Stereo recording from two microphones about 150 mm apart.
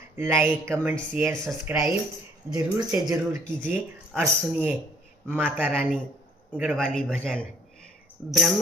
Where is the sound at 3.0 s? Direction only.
20° right (ahead or behind).